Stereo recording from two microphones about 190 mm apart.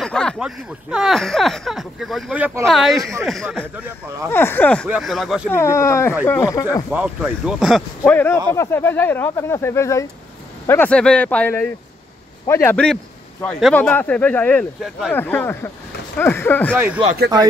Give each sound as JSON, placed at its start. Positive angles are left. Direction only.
{"t": 0.0, "sound": "speech", "side_deg": 5}
{"t": 2.7, "sound": "speech", "side_deg": 0}
{"t": 4.3, "sound": "a man's voice", "side_deg": 10}
{"t": 4.8, "sound": "speech", "side_deg": -5}
{"t": 5.5, "sound": "a man's voice", "side_deg": 15}
{"t": 6.9, "sound": "speech", "side_deg": -5}
{"t": 8.0, "sound": "a man's voice", "side_deg": 10}
{"t": 14.8, "sound": "speech", "side_deg": 0}
{"t": 15.1, "sound": "a man's voice", "side_deg": 10}
{"t": 16.7, "sound": "speech", "side_deg": -10}